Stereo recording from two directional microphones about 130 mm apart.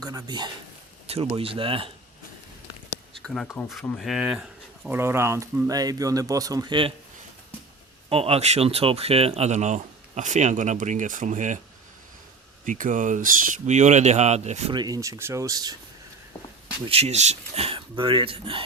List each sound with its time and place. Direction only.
0.0 s speech: 30° right (ahead or behind)
1.0 s speech: 50° right (ahead or behind)
3.2 s speech: 5° left (ahead or behind)
4.9 s speech: 20° right (ahead or behind); by 6.9 s 40° right (ahead or behind)
8.1 s speech: 50° right (ahead or behind); by 11.6 s 70° right (ahead or behind)
12.6 s speech: 90° right; by 14.7 s 60° right (ahead or behind)
14.7 s speech: 30° right (ahead or behind)
16.9 s speech: 55° right (ahead or behind)